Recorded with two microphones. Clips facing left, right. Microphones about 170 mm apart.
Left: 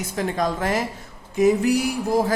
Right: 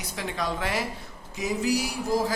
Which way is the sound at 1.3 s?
55° left (ahead or behind).